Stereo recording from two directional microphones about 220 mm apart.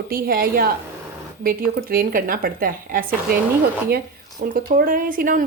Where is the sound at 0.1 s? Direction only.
40° right (ahead or behind).